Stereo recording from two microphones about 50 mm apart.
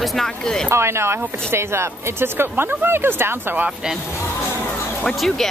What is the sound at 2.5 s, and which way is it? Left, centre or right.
Speech, right.